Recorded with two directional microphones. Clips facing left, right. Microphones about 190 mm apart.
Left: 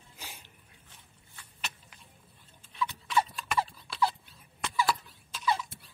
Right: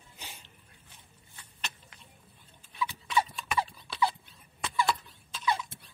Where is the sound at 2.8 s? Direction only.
Centre (ahead or behind).